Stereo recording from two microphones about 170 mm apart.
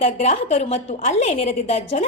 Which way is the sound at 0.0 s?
40° left (ahead or behind).